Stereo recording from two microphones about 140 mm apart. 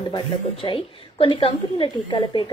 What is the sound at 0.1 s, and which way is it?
A woman's voice, 40° left (ahead or behind).